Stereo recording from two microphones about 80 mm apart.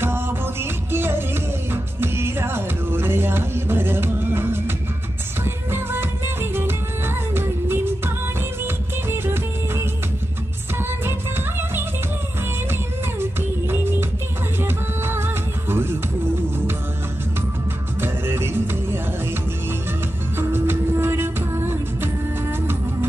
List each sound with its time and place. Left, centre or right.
0.0 s music: right
9.1 s music: right
11.1 s music: right
13.2 s music: right
18.0 s music: right
20.3 s music: right